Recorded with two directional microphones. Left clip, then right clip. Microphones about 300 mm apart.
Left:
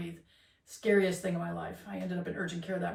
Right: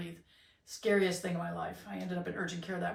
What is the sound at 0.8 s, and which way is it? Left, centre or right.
Speech, centre.